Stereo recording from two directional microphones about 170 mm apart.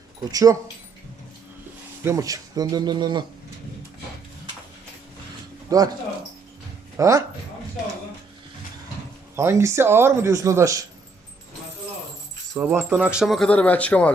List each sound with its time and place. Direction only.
0.3 s speech: 20° right (ahead or behind)
2.0 s speech: 20° right (ahead or behind)
5.7 s speech: 20° right (ahead or behind)
6.9 s a man's voice: 15° right (ahead or behind)
9.3 s a man's voice: 15° right (ahead or behind)
12.5 s speech: 5° right (ahead or behind); by 14.1 s 10° left (ahead or behind)